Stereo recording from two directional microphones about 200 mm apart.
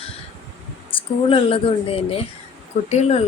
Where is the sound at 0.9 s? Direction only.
25° left (ahead or behind).